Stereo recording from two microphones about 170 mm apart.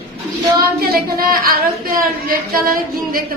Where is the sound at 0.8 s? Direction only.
60° right (ahead or behind).